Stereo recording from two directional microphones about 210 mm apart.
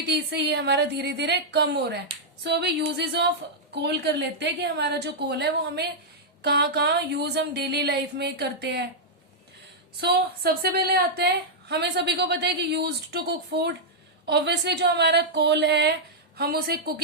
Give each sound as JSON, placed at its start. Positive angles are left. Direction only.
{"t": 0.1, "sound": "a woman's voice", "side_deg": -50}
{"t": 10.0, "sound": "a woman's voice", "side_deg": -50}